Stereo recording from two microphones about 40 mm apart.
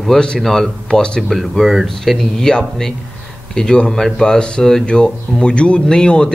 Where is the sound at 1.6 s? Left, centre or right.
Centre.